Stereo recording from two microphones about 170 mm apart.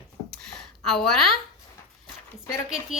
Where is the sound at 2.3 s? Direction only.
15° left (ahead or behind).